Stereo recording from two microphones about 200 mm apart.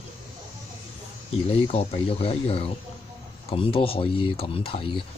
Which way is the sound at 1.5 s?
30° left (ahead or behind).